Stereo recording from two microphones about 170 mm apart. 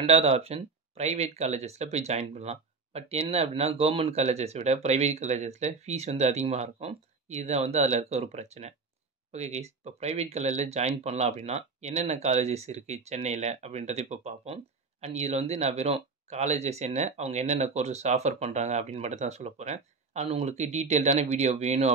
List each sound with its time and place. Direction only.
0.0 s speech: 35° right (ahead or behind)